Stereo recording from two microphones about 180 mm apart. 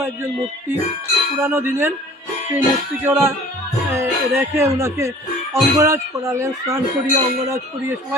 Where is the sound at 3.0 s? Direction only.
15° right (ahead or behind).